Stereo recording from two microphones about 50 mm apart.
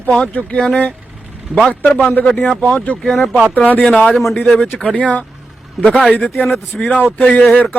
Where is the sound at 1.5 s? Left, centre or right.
Right.